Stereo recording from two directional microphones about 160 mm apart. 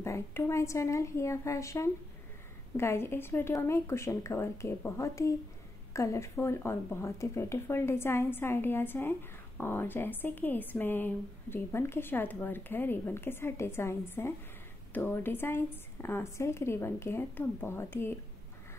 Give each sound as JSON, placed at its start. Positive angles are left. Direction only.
{"t": 0.0, "sound": "speech", "side_deg": 15}